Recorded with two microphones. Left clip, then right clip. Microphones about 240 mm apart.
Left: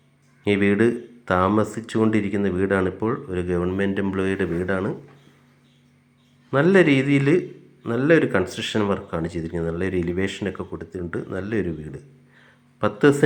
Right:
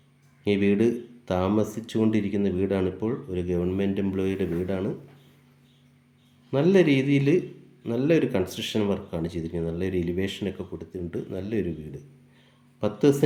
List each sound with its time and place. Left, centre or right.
0.4 s speech: centre
6.5 s speech: centre
12.8 s speech: centre